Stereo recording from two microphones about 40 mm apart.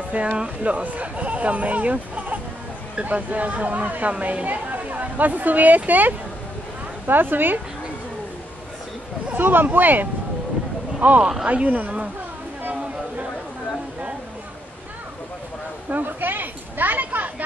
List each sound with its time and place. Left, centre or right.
0.1 s speech: right
7.1 s speech: right
9.3 s speech: right
11.0 s speech: right
15.9 s a sound: right